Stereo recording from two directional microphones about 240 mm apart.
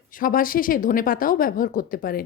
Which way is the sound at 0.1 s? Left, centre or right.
Left.